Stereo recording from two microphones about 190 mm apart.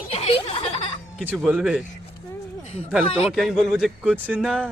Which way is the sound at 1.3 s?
5° right (ahead or behind).